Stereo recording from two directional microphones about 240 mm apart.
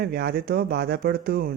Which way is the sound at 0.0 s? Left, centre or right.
Right.